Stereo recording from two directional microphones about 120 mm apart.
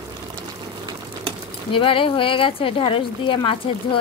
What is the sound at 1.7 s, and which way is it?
A woman's voice, 45° left (ahead or behind).